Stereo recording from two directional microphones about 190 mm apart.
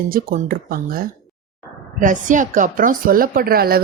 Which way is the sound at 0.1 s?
50° right (ahead or behind).